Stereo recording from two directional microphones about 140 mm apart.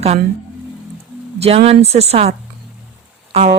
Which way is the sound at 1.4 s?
50° right (ahead or behind).